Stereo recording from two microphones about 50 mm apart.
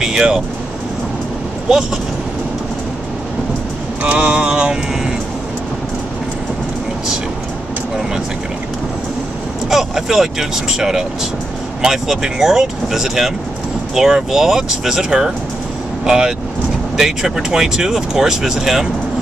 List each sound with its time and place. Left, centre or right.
0.0 s speech: centre
4.0 s vehicle: right
4.5 s speech: centre
9.7 s speech: centre